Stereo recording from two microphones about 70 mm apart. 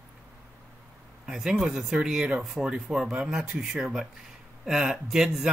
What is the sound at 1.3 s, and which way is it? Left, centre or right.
Speech, centre.